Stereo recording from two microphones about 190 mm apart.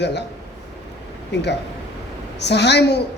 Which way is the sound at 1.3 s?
65° left (ahead or behind).